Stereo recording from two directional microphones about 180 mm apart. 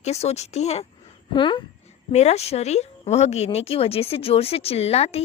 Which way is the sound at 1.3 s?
25° left (ahead or behind).